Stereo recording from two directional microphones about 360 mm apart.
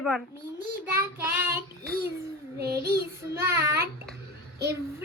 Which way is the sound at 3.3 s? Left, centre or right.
Centre.